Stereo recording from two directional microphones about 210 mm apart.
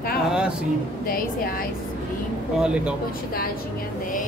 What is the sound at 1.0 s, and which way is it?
Speech, 45° left (ahead or behind).